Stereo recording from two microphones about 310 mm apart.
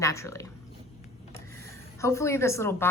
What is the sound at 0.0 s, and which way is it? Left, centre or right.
Speech, centre.